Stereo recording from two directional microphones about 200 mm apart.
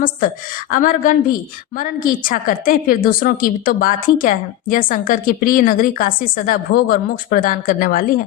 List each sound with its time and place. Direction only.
0.7 s a woman's voice: 40° left (ahead or behind)